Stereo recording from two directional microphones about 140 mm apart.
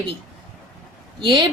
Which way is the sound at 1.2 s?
35° right (ahead or behind).